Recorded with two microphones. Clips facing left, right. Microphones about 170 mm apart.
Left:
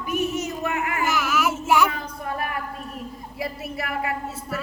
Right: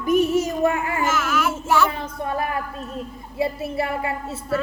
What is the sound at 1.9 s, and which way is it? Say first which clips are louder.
A child's voice: right 4 dB; 25° right (ahead or behind).